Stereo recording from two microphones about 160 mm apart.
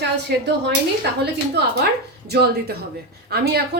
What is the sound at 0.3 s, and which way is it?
Speech, 90° right.